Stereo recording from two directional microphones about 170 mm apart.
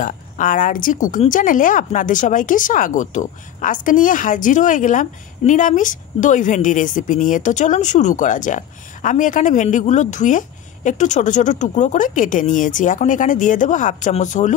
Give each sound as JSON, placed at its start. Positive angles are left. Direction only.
{"t": 0.0, "sound": "speech", "side_deg": 50}